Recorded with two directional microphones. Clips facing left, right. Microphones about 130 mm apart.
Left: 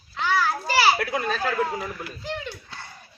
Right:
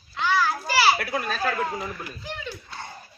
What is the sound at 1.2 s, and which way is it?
Speech, 10° right (ahead or behind).